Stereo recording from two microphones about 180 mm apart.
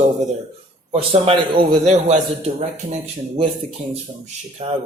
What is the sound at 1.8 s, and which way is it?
Speech, 40° right (ahead or behind).